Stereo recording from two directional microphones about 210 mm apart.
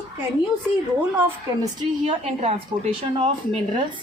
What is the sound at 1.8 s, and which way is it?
Speech, 30° right (ahead or behind).